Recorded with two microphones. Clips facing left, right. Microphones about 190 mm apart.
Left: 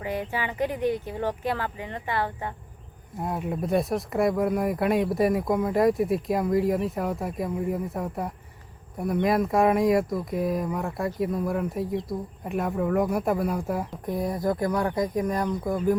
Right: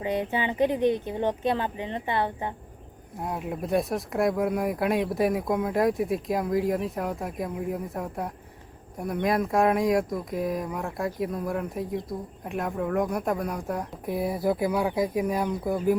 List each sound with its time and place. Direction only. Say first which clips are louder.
0.0 s speech: right 3 dB; 20° right (ahead or behind)
3.2 s speech: left 2 dB; centre (ahead or behind)
14.1 s speech: right 1 dB; 5° right (ahead or behind)